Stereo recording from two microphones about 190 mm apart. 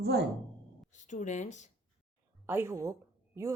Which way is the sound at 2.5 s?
10° right (ahead or behind).